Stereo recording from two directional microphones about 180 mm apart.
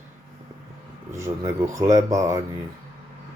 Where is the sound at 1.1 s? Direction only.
15° right (ahead or behind).